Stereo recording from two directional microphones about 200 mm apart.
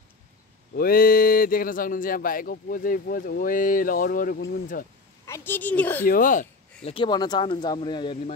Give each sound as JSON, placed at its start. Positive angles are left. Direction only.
{"t": 0.7, "sound": "speech", "side_deg": 50}
{"t": 5.2, "sound": "a woman's voice", "side_deg": 10}
{"t": 6.0, "sound": "speech", "side_deg": 45}
{"t": 6.8, "sound": "speech", "side_deg": 25}